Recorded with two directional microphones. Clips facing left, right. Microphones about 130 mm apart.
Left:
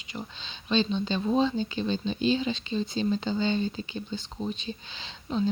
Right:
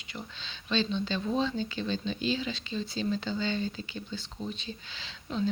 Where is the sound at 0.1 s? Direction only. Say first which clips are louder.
Left 4 dB; 20° left (ahead or behind).